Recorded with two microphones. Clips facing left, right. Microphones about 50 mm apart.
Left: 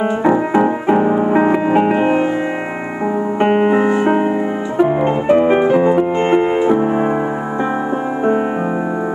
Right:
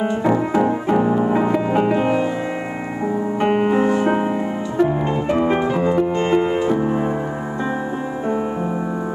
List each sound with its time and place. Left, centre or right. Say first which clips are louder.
0.0 s music: left 4 dB; left
3.3 s music: left 4 dB; left